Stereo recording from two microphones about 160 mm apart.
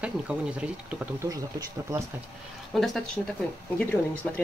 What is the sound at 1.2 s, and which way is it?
Speech, 20° right (ahead or behind).